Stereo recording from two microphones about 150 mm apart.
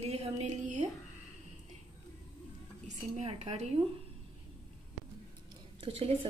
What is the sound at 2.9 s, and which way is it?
Speech, 45° right (ahead or behind).